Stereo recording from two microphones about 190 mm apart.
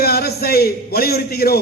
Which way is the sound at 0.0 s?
55° left (ahead or behind).